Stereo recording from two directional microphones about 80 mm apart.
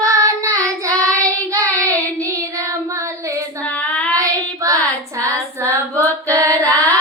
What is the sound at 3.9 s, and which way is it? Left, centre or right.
Child singing, centre.